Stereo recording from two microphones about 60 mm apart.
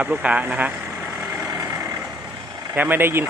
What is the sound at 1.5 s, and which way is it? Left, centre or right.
Vehicle, right.